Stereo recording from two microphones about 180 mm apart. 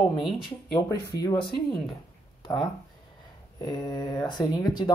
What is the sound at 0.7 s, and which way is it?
Speech, 20° left (ahead or behind).